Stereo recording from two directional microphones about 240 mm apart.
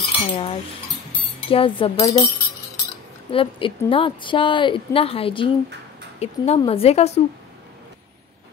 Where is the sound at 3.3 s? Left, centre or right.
Left.